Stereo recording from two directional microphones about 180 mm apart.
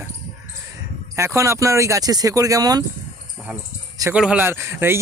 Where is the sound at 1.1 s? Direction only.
15° right (ahead or behind).